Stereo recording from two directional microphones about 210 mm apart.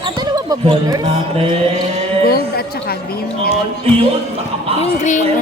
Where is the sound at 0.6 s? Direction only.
20° right (ahead or behind).